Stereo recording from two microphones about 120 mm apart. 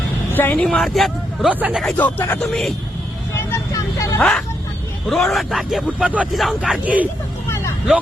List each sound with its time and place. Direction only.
0.3 s speech: 15° left (ahead or behind)
2.4 s speech: 5° left (ahead or behind)
3.3 s vehicle: 25° left (ahead or behind)
4.2 s speech: 5° left (ahead or behind)
6.8 s speech: 10° right (ahead or behind)